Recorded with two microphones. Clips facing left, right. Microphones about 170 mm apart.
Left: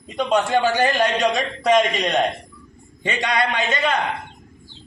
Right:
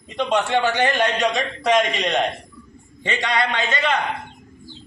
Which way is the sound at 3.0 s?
20° left (ahead or behind).